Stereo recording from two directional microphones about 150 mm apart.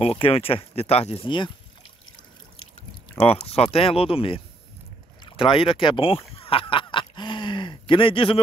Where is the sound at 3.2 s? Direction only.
40° left (ahead or behind).